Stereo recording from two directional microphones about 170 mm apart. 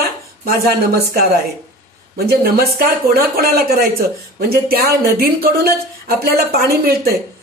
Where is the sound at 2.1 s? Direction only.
65° right (ahead or behind).